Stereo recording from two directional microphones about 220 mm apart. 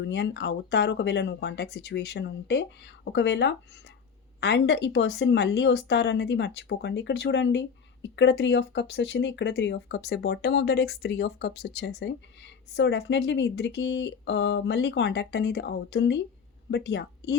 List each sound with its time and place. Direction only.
0.0 s speech: 50° left (ahead or behind)